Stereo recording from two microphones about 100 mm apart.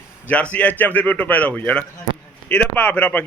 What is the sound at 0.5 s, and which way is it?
A man's voice, 15° left (ahead or behind).